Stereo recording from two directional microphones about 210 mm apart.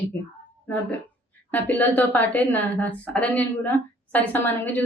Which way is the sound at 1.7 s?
10° left (ahead or behind).